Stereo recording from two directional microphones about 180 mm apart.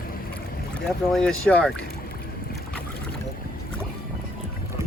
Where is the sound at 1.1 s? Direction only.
5° left (ahead or behind).